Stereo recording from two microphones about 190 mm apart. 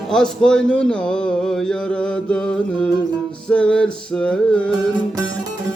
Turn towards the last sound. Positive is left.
turn(degrees=5)  # may be behind; listen again after turning